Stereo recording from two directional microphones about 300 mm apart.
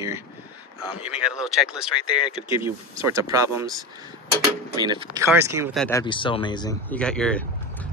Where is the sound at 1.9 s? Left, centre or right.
Centre.